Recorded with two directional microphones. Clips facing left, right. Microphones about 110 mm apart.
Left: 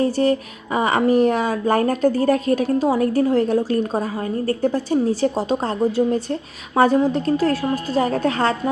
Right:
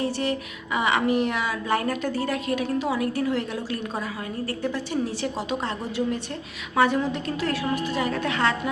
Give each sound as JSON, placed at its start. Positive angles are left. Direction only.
{"t": 0.0, "sound": "speech", "side_deg": 40}